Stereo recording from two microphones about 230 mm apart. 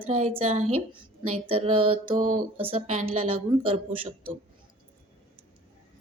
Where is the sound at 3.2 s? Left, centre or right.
Right.